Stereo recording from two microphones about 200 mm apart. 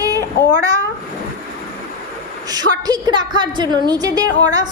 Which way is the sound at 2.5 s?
20° right (ahead or behind).